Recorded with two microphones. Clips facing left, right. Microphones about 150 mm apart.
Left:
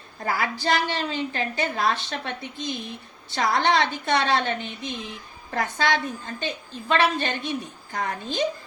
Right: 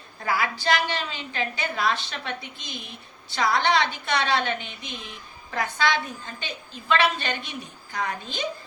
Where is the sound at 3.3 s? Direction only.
45° left (ahead or behind).